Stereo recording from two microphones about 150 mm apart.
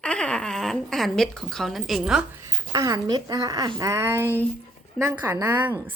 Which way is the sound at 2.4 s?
25° right (ahead or behind).